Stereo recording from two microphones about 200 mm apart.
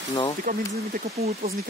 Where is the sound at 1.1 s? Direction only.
30° right (ahead or behind).